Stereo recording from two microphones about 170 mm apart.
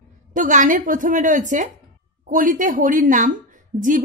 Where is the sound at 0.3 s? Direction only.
50° right (ahead or behind).